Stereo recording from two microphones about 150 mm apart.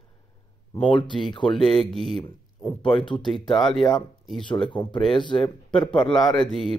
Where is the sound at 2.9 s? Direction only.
30° left (ahead or behind).